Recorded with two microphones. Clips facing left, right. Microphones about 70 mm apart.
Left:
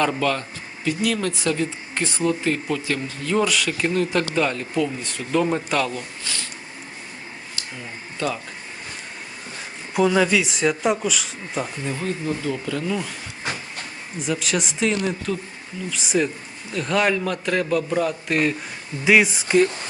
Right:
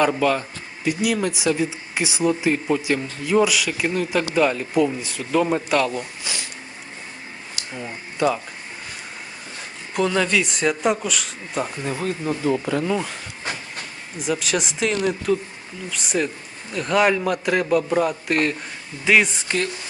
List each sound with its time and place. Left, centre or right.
0.0 s speech: centre
5.9 s speech: centre
8.2 s speech: centre
9.9 s speech: centre
11.8 s speech: right
14.2 s speech: centre
19.0 s speech: centre